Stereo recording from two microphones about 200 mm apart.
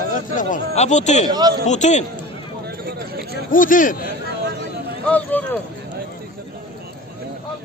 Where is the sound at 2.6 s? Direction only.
50° right (ahead or behind).